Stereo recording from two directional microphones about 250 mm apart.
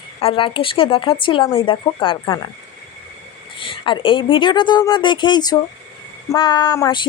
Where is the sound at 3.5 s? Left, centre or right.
Left.